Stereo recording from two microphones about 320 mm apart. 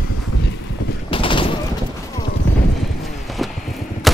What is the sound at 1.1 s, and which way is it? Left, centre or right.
Fusillade, centre.